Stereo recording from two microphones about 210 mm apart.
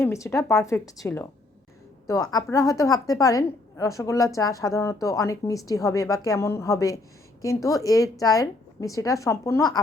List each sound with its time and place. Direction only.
0.0 s a woman's voice: 15° left (ahead or behind)
2.3 s a woman's voice: 15° left (ahead or behind)